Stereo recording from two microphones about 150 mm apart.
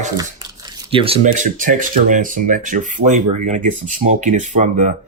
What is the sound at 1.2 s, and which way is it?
Speech, 60° right (ahead or behind).